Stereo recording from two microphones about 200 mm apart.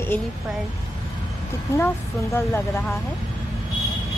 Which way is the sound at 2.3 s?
10° left (ahead or behind).